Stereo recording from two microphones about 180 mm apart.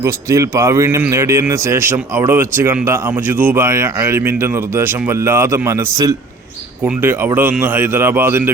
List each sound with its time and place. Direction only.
0.0 s a man's voice: 15° right (ahead or behind)